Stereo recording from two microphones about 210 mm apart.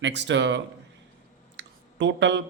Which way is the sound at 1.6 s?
55° right (ahead or behind).